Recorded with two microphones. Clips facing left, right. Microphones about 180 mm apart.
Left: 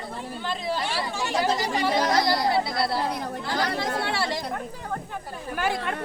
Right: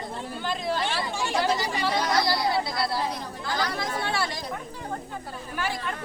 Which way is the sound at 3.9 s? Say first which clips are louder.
Left 2 dB; 65° left (ahead or behind).